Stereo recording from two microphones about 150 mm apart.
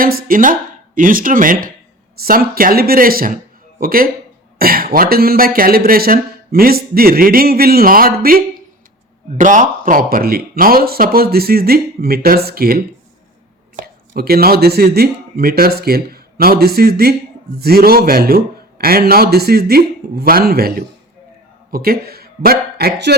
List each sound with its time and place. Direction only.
0.0 s speech: 75° right (ahead or behind)
2.2 s speech: 75° right (ahead or behind)
9.4 s speech: 55° right (ahead or behind); by 12.8 s 90° right
13.7 s a man's voice: 75° right (ahead or behind)